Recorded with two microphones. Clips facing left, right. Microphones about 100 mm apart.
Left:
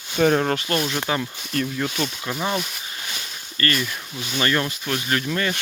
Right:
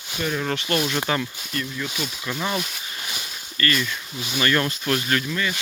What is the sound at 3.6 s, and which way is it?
Speech, 30° left (ahead or behind).